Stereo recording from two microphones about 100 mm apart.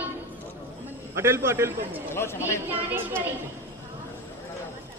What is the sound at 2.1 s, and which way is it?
Speech, 25° left (ahead or behind).